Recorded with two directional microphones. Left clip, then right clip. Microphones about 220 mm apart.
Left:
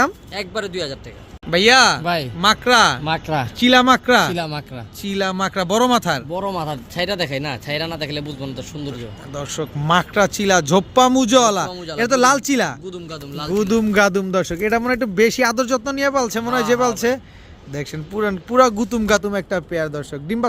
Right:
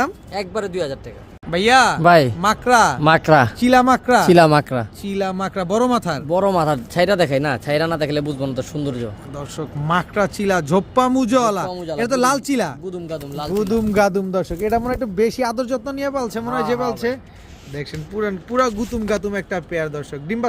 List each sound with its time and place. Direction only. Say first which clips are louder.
0.3 s speech: right 6 dB; 20° right (ahead or behind)
1.5 s speech: left 1 dB; 5° left (ahead or behind)
2.0 s speech: right 10 dB; 45° right (ahead or behind)
2.4 s speech: left 1 dB; centre (ahead or behind)
3.0 s speech: right 9 dB; 55° right (ahead or behind)
3.6 s speech: left 1 dB; centre (ahead or behind)
4.3 s speech: right 13 dB; 50° right (ahead or behind)
5.0 s speech: left 6 dB; centre (ahead or behind)
6.3 s speech: right 7 dB; 55° right (ahead or behind)
9.3 s speech: left 3 dB; 5° left (ahead or behind)
11.7 s speech: right 3 dB; 25° right (ahead or behind)
11.9 s speech: left 3 dB; centre (ahead or behind)
12.9 s speech: right 3 dB; 30° right (ahead or behind)
13.6 s speech: left 1 dB; 5° left (ahead or behind)